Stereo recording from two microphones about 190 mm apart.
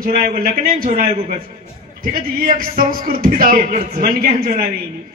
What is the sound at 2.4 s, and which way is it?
A man's voice, 50° right (ahead or behind).